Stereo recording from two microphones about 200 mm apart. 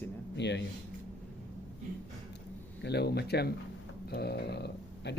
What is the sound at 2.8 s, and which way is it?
Speech, 55° left (ahead or behind).